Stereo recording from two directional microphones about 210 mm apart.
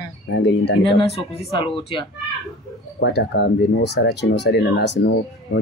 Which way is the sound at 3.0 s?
55° left (ahead or behind).